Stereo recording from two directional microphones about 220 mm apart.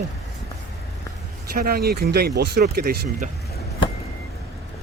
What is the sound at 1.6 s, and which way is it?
Speech, 45° right (ahead or behind).